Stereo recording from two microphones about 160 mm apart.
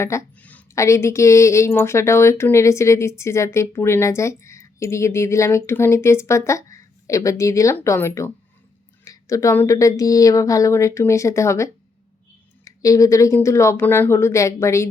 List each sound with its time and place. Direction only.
0.0 s a woman's voice: 15° left (ahead or behind)